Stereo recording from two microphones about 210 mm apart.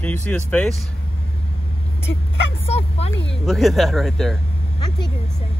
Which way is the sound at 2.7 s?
30° left (ahead or behind).